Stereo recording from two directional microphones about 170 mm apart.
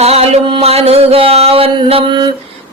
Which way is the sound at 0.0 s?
40° right (ahead or behind).